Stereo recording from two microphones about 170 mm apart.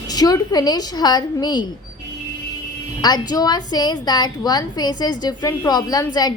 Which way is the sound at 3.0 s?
25° left (ahead or behind).